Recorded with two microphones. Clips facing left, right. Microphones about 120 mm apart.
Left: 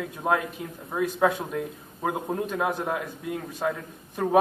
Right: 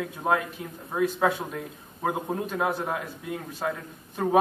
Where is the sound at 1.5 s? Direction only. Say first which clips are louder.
Left 5 dB; centre (ahead or behind).